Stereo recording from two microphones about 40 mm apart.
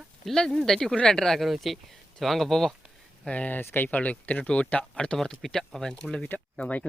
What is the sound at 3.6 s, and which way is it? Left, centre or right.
Speech, left.